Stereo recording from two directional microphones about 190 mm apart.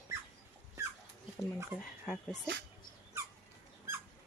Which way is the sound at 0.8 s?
15° right (ahead or behind).